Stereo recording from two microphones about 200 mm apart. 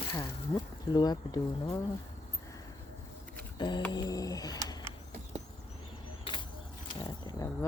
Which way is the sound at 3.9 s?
20° left (ahead or behind).